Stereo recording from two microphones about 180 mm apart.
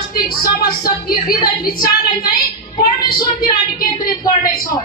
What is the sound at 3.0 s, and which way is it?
Speech, 25° left (ahead or behind).